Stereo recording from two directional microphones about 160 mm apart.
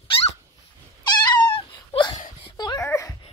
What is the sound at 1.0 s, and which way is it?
Cat, 25° left (ahead or behind).